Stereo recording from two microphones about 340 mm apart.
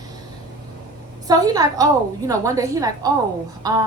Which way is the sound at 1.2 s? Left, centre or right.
Centre.